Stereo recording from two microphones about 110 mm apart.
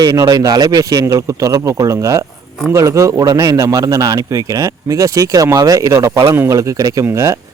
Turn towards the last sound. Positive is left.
turn(degrees=-25)  # may be behind; listen again after turning